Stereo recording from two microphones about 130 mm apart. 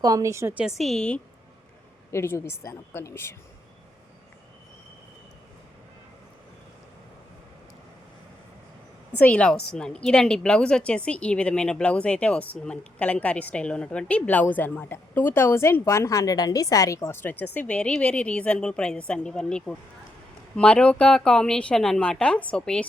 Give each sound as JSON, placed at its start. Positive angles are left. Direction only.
{"t": 0.0, "sound": "a woman's voice", "side_deg": -25}
{"t": 0.8, "sound": "speech", "side_deg": 5}
{"t": 2.0, "sound": "a woman's voice", "side_deg": 20}
{"t": 9.1, "sound": "a woman's voice", "side_deg": 10}